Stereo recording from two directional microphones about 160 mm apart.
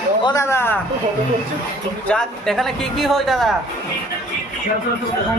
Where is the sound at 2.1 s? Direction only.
5° left (ahead or behind).